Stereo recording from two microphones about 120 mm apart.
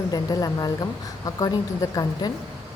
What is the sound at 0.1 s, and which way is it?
A woman's voice, 30° left (ahead or behind).